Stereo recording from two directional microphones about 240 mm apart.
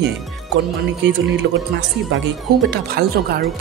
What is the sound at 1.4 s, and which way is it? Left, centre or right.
Speech, right.